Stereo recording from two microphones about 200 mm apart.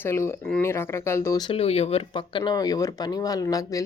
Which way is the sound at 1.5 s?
30° left (ahead or behind).